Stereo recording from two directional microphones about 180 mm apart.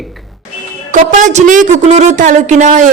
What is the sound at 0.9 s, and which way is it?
A man's voice, 40° right (ahead or behind).